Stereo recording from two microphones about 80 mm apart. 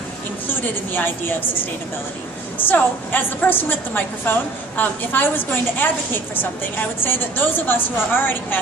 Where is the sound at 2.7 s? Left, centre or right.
Left.